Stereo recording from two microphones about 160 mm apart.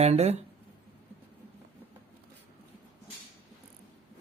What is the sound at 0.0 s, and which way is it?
Speech, 40° right (ahead or behind).